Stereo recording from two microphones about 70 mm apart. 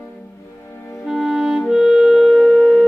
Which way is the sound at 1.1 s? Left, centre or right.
Centre.